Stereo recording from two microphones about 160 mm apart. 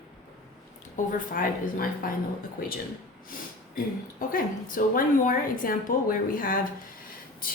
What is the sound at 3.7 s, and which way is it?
Speech, 60° left (ahead or behind).